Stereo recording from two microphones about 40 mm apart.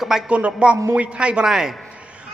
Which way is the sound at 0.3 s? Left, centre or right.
Right.